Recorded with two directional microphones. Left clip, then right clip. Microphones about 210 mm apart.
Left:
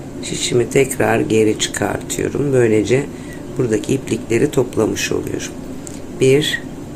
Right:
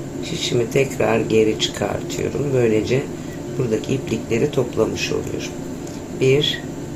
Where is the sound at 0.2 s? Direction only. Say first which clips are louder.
Left 4 dB; 25° left (ahead or behind).